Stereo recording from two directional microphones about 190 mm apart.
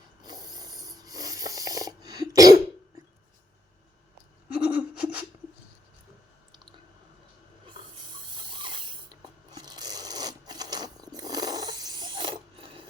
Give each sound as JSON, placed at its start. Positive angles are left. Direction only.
{"t": 0.2, "sound": "snoring", "side_deg": -20}
{"t": 4.4, "sound": "a sound", "side_deg": -10}
{"t": 8.1, "sound": "filing", "side_deg": -25}